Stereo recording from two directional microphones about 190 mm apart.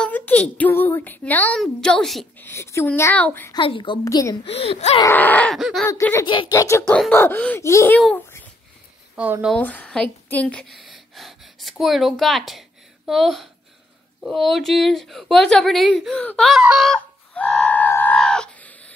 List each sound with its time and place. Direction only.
0.0 s speech: 10° left (ahead or behind)
3.5 s a woman's voice: 25° left (ahead or behind)
4.5 s speech: 30° left (ahead or behind)
5.0 s speech: 10° left (ahead or behind)
5.9 s speech: 15° left (ahead or behind)
6.2 s a child's voice: 25° left (ahead or behind); by 8.4 s 5° left (ahead or behind)
9.1 s speech: 5° right (ahead or behind)
9.6 s a woman's voice: 10° left (ahead or behind)